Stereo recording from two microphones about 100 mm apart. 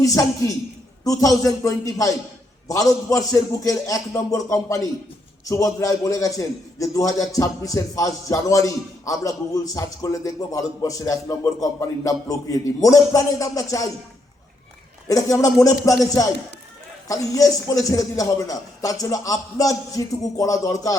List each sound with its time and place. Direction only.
0.0 s a man's voice: 35° left (ahead or behind)
15.0 s a man's voice: 35° left (ahead or behind)